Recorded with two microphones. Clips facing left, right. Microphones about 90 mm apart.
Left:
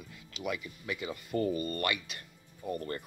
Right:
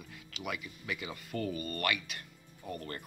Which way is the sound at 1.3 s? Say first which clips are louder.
Left 5 dB; 25° left (ahead or behind).